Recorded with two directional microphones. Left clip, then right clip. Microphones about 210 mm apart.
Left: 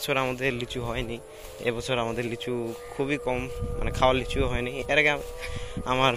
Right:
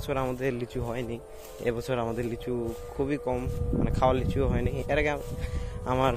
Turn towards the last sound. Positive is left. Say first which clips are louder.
# left 3 dB
turn(degrees=-15)  # may be behind; listen again after turning